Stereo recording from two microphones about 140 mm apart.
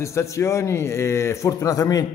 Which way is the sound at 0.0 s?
20° left (ahead or behind).